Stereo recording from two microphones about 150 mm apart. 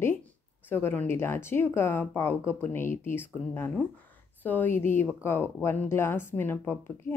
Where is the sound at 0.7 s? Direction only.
15° left (ahead or behind).